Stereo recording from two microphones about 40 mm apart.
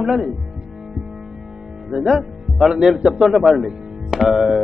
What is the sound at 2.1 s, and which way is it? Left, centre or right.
A man's voice, centre.